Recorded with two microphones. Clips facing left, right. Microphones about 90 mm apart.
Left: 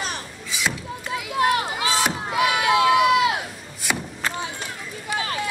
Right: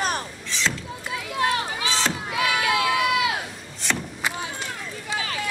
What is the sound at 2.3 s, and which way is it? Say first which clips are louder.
Run: left 4 dB; 20° left (ahead or behind).